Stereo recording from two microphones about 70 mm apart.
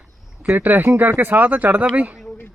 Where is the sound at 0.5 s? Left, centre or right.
Right.